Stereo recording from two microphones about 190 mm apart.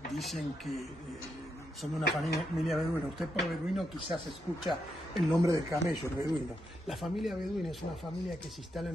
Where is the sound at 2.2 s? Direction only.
Centre (ahead or behind).